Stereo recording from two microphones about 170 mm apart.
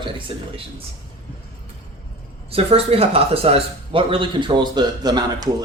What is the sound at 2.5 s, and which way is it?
A man's voice, 35° right (ahead or behind).